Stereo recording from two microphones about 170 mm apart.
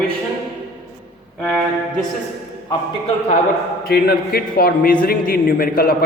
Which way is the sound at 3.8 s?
65° left (ahead or behind).